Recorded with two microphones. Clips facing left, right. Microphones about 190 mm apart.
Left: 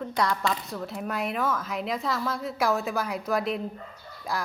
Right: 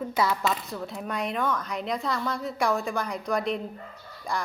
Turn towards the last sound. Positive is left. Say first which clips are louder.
# even
turn(degrees=5)  # may be behind; listen again after turning